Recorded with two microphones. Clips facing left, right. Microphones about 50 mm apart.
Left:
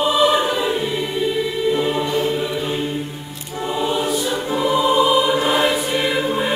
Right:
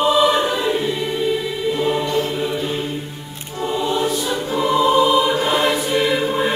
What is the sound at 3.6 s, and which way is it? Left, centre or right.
Choir, centre.